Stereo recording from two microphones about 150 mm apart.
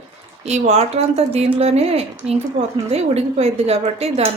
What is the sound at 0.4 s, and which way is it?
A woman's voice, 45° right (ahead or behind).